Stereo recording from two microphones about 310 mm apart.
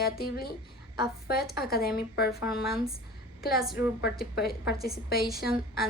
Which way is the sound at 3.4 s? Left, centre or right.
Left.